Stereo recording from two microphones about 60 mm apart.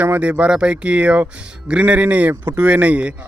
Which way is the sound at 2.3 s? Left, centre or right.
Right.